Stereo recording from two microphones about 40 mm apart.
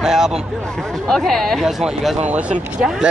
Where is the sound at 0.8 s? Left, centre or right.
Centre.